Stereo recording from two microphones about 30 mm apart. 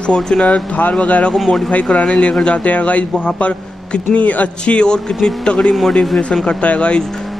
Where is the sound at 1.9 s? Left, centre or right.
Left.